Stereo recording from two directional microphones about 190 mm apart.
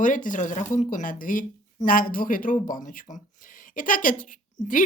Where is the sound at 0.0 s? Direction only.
45° left (ahead or behind).